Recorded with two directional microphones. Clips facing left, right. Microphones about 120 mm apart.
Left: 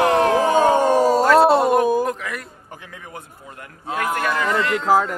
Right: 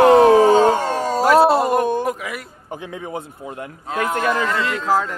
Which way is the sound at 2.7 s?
20° right (ahead or behind).